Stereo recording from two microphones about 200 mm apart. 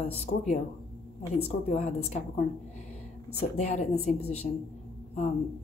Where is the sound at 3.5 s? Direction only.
35° left (ahead or behind).